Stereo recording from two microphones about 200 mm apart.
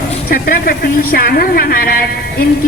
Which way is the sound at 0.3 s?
45° left (ahead or behind).